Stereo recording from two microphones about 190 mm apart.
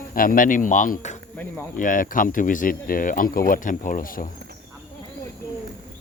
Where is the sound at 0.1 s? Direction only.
45° left (ahead or behind).